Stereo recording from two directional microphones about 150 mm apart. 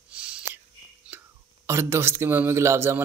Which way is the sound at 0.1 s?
5° right (ahead or behind).